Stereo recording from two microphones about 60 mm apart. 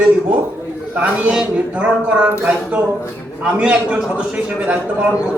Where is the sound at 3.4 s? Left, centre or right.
Right.